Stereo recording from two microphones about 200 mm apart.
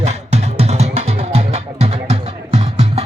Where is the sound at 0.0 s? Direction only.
30° right (ahead or behind).